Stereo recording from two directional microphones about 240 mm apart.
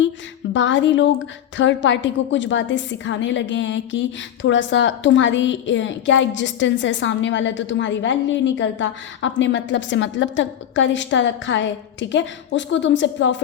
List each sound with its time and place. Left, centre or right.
0.5 s a woman's voice: left